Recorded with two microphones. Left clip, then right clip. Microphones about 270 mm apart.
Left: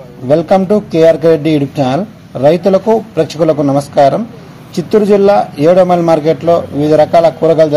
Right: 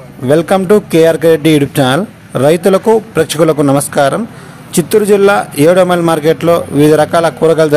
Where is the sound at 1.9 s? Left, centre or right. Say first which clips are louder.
Right 2 dB; right.